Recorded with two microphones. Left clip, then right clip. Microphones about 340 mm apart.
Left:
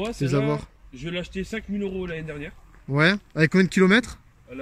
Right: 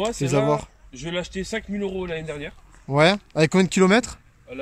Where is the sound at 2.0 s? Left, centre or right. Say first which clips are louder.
Right 3 dB; centre.